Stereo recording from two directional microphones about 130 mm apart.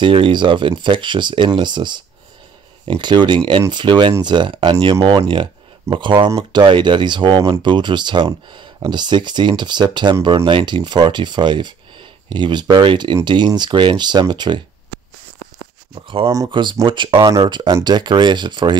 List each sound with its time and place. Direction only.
0.0 s speech: 40° right (ahead or behind)
15.9 s speech: 45° right (ahead or behind)